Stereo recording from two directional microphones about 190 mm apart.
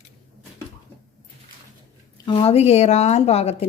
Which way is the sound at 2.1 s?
25° left (ahead or behind).